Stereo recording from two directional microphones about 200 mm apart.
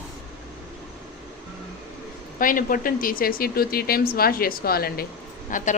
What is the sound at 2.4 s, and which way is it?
A man's voice, 45° left (ahead or behind).